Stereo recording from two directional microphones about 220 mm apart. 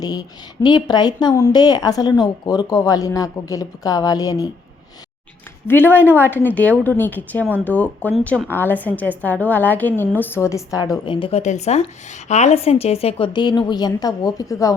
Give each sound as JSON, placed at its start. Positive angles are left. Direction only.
{"t": 0.0, "sound": "a woman's voice", "side_deg": 15}
{"t": 5.6, "sound": "a woman's voice", "side_deg": 10}